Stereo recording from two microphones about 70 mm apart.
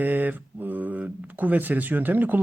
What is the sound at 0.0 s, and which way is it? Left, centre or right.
Speech, right.